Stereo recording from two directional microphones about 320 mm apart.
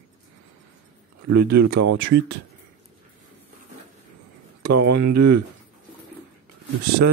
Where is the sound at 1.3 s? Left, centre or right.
Right.